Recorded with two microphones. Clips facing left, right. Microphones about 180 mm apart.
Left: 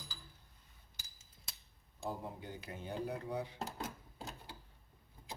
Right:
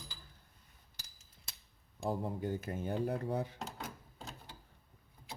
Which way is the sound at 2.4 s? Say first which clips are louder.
Right 9 dB; 45° right (ahead or behind).